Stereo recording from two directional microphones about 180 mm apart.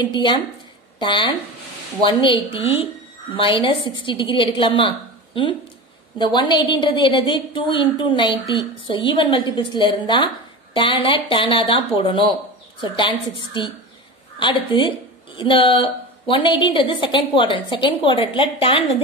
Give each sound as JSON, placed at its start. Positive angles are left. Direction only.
{"t": 0.0, "sound": "a woman's voice", "side_deg": 25}